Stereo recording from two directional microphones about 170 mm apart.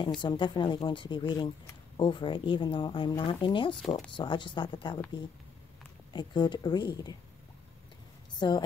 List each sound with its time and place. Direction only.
0.0 s speech: 25° left (ahead or behind)
6.1 s speech: 25° left (ahead or behind)
8.4 s speech: 25° left (ahead or behind)